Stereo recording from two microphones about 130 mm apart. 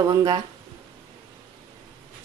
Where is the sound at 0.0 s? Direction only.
30° right (ahead or behind).